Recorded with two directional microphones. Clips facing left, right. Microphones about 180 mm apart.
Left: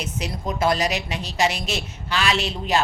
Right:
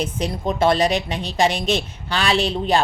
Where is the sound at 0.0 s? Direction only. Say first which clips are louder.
Right 5 dB; 30° right (ahead or behind).